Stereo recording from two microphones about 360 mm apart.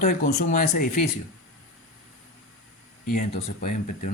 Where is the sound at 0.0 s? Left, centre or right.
Left.